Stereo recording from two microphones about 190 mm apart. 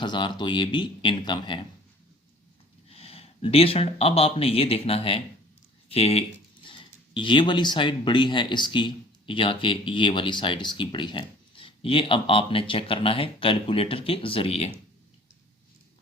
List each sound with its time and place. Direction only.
0.0 s speech: 25° left (ahead or behind)
2.9 s speech: 30° left (ahead or behind)